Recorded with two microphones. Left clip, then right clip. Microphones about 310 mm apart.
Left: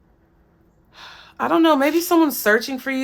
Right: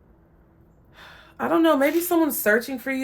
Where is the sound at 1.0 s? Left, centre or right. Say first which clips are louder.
Left 5 dB; centre.